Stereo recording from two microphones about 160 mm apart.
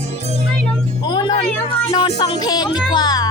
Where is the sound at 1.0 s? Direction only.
30° left (ahead or behind).